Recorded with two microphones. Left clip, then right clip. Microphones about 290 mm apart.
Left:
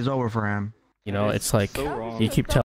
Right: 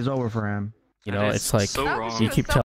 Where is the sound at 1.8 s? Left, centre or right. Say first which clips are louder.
Right 4 dB; right.